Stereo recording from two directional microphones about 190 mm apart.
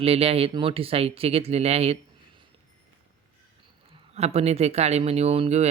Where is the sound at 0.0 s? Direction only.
30° right (ahead or behind).